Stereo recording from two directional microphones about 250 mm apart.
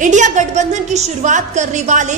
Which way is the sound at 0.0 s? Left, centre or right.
Right.